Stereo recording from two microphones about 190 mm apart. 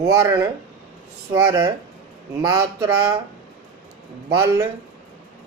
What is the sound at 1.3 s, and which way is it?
Speech, 20° right (ahead or behind).